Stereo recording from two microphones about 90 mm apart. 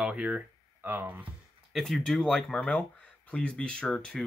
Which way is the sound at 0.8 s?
20° right (ahead or behind).